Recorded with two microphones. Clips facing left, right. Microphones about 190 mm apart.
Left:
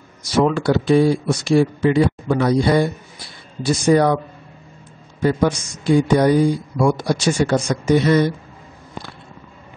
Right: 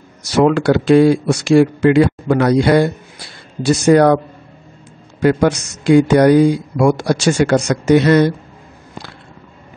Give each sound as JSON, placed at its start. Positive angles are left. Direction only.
{"t": 0.5, "sound": "speech", "side_deg": -75}
{"t": 5.2, "sound": "speech", "side_deg": -75}